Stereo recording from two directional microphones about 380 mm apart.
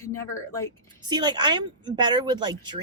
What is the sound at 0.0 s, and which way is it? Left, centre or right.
Speech, centre.